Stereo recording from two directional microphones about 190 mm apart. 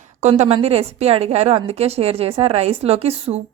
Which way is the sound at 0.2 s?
35° right (ahead or behind).